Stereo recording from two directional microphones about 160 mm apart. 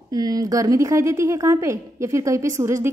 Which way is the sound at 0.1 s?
25° right (ahead or behind).